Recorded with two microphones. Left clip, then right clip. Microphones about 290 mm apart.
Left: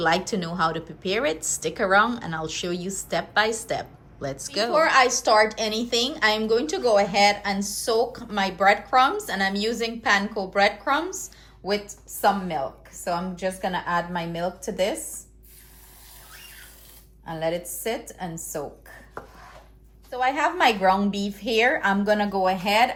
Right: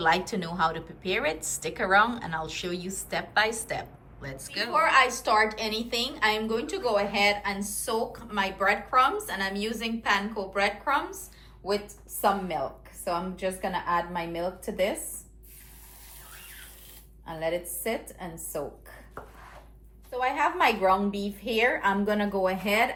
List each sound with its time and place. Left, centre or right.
0.0 s a woman's voice: centre
4.7 s a woman's voice: left
13.1 s a woman's voice: left
17.2 s a woman's voice: left
20.1 s a woman's voice: left